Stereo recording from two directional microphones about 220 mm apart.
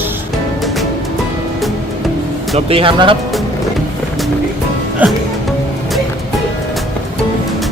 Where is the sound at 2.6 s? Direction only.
25° right (ahead or behind).